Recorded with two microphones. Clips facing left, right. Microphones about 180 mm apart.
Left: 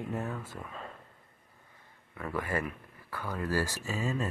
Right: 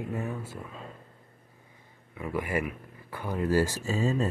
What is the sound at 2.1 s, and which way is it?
Speech, 15° right (ahead or behind).